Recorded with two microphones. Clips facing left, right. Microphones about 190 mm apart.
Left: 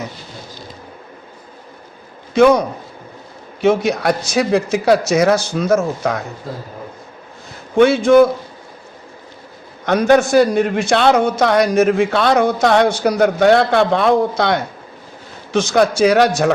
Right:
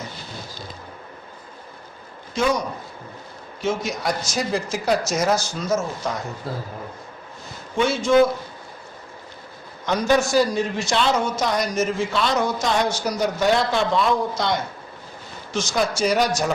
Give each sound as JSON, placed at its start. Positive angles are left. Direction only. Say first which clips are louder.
{"t": 2.3, "sound": "a man's voice", "louder": "left 11 dB", "side_deg": 60}
{"t": 7.8, "sound": "a man's voice", "louder": "left 7 dB", "side_deg": 60}
{"t": 9.8, "sound": "a man's voice", "louder": "left 7 dB", "side_deg": 60}